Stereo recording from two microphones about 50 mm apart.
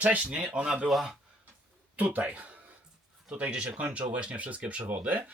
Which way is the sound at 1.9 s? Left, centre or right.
Right.